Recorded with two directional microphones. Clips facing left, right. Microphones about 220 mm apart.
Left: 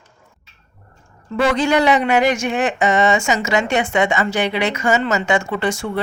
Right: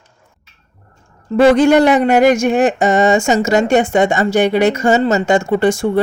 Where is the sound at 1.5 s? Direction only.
50° right (ahead or behind).